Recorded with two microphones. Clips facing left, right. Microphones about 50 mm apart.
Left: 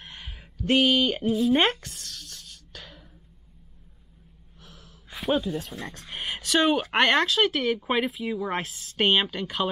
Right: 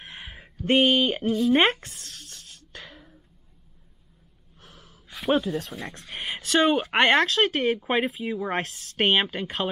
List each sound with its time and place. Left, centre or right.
0.0 s a sound: right
1.2 s speech: centre
1.5 s a woman's voice: centre
2.2 s beatboxing: centre
4.6 s gasp: centre
5.3 s speech: centre
7.5 s speech: centre